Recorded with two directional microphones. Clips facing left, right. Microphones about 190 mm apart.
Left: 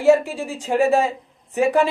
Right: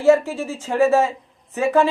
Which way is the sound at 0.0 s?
15° left (ahead or behind).